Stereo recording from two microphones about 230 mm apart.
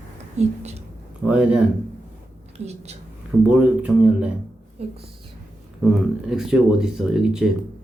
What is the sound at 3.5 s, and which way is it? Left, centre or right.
Speech, centre.